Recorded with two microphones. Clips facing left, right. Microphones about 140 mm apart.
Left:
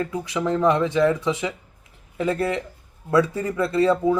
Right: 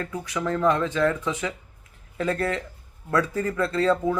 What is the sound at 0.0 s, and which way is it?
Speech, 15° left (ahead or behind).